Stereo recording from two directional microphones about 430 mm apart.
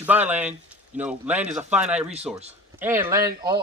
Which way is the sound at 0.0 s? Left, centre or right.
Centre.